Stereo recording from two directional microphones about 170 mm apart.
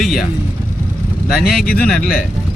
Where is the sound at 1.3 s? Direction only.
Centre (ahead or behind).